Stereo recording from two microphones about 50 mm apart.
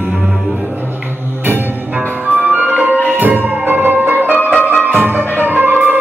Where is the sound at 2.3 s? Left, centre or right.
Right.